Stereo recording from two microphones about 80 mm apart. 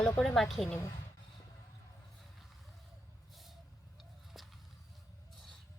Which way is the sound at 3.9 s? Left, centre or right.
Centre.